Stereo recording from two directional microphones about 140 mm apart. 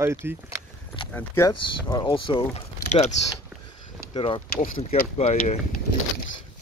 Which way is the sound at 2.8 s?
55° left (ahead or behind).